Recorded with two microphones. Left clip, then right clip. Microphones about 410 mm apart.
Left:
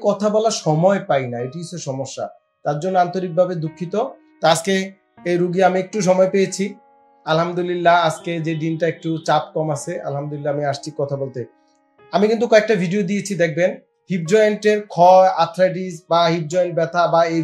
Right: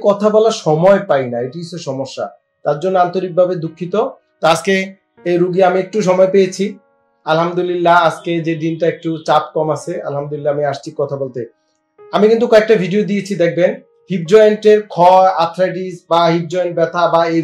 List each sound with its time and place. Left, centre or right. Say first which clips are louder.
0.0 s speech: right 6 dB; left